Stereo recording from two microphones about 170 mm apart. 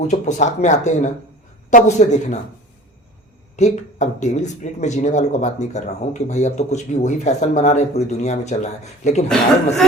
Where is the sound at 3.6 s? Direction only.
45° left (ahead or behind).